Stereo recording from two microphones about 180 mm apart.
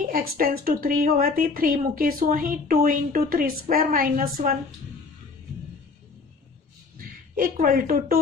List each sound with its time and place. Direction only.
0.1 s a woman's voice: 55° right (ahead or behind)
7.3 s a woman's voice: 50° right (ahead or behind)